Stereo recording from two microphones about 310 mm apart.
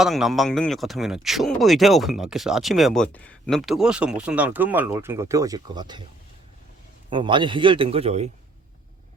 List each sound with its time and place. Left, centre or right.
0.0 s speech: centre
7.1 s speech: centre